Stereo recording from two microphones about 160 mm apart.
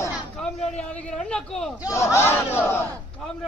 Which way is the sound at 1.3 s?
5° left (ahead or behind).